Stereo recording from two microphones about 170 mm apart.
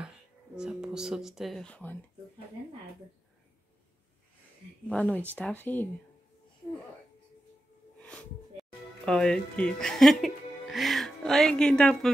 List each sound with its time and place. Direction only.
0.6 s speech: 5° right (ahead or behind)
4.8 s speech: 10° left (ahead or behind)
8.0 s speech: 5° left (ahead or behind)